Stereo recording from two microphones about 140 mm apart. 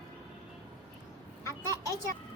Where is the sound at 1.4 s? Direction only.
20° left (ahead or behind).